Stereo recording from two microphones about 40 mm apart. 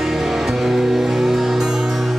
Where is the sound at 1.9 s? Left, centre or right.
Centre.